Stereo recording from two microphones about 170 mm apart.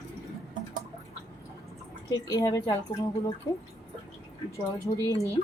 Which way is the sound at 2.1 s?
20° left (ahead or behind).